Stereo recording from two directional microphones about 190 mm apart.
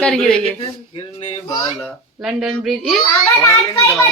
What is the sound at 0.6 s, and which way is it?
Speech, 30° left (ahead or behind).